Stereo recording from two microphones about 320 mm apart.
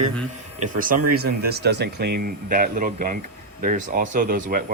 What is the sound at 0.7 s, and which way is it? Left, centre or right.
Speech, right.